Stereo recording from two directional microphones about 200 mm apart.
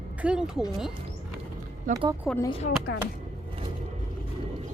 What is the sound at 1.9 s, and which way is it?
Speech, 40° right (ahead or behind).